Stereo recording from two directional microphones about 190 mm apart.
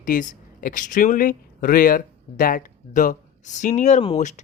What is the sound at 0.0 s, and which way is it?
Speech, 45° left (ahead or behind).